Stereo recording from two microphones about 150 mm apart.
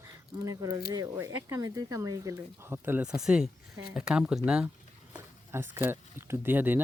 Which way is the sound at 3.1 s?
5° right (ahead or behind).